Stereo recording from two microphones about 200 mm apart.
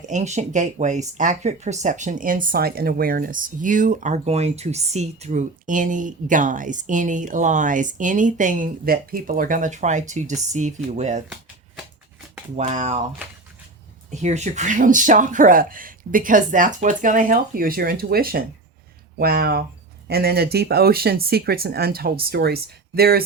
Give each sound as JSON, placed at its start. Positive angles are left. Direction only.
{"t": 0.0, "sound": "speech", "side_deg": -40}
{"t": 12.5, "sound": "speech", "side_deg": -35}
{"t": 14.1, "sound": "speech", "side_deg": -35}